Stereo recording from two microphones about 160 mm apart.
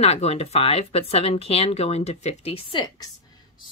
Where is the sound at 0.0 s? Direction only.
40° left (ahead or behind).